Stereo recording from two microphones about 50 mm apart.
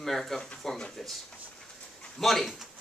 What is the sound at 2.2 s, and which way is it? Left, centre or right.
Speech, centre.